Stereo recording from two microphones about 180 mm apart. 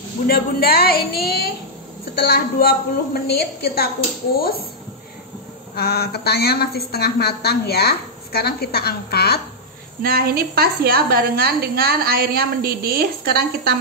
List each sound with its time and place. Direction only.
0.3 s a woman's voice: 60° left (ahead or behind)
5.8 s a woman's voice: 60° left (ahead or behind)
10.0 s a woman's voice: 55° right (ahead or behind)